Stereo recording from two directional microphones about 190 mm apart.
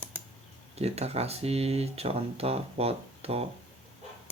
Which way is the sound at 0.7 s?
35° right (ahead or behind).